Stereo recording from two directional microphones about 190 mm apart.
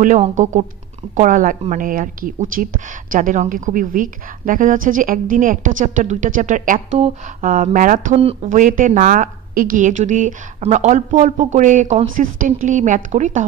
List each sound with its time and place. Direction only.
0.2 s speech: 40° right (ahead or behind)